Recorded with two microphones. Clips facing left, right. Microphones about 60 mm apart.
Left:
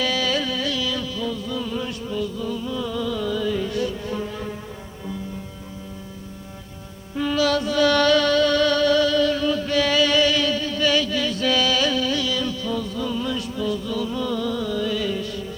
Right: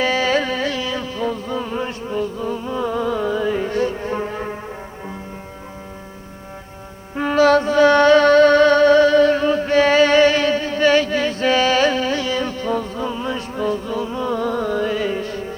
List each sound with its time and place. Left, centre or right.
0.0 s carnatic music: right
7.2 s music: right